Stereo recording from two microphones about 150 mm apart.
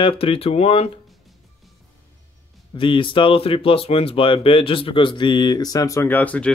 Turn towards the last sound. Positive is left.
turn(degrees=10)  # may be behind; listen again after turning